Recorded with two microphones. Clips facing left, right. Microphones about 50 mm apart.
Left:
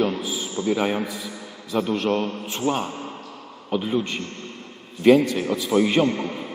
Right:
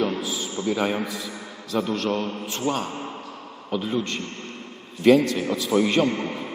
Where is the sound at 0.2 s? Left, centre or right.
Centre.